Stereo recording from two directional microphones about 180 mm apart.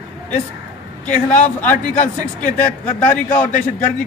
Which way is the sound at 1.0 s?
10° left (ahead or behind).